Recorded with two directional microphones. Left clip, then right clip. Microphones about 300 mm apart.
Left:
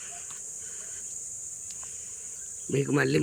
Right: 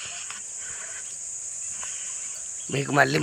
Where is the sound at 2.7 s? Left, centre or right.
Centre.